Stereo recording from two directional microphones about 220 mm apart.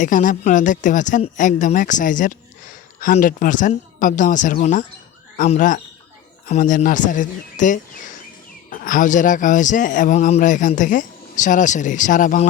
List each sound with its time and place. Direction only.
0.0 s speech: 35° left (ahead or behind)